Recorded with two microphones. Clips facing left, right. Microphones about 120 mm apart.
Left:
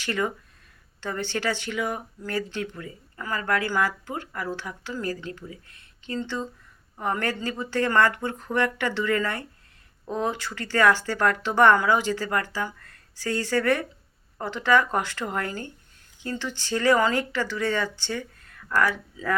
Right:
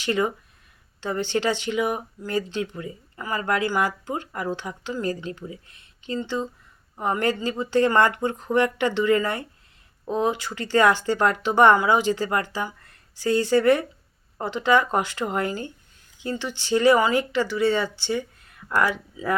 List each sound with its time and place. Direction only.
0.0 s speech: 15° right (ahead or behind)